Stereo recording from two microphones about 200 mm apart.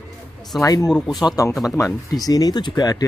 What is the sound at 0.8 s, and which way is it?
Speech, centre (ahead or behind).